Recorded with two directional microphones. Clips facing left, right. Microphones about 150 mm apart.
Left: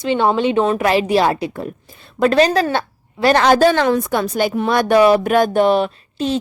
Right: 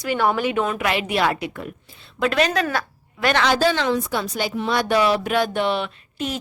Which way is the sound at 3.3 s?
45° left (ahead or behind).